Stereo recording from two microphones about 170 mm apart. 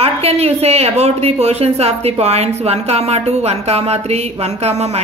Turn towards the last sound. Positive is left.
turn(degrees=-40)  # may be behind; listen again after turning